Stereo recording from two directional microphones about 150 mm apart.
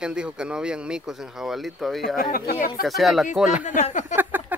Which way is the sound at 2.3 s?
75° left (ahead or behind).